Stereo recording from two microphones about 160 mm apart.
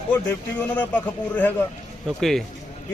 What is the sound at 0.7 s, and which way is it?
A man's voice, 10° left (ahead or behind).